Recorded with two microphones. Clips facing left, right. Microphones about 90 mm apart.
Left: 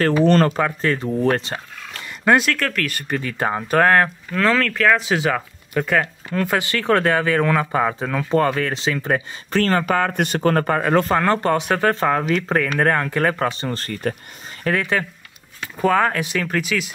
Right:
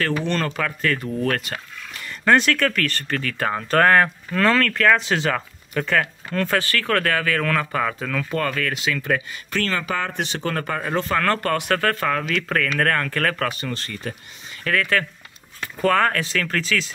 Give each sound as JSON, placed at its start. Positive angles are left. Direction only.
{"t": 0.0, "sound": "speech", "side_deg": 35}
{"t": 0.6, "sound": "speech", "side_deg": 25}
{"t": 2.0, "sound": "speech", "side_deg": 10}
{"t": 10.8, "sound": "speech", "side_deg": 65}
{"t": 11.1, "sound": "speech", "side_deg": 20}
{"t": 14.6, "sound": "speech", "side_deg": 20}